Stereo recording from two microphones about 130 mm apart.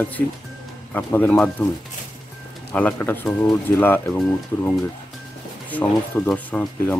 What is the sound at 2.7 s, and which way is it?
Speech, 15° left (ahead or behind).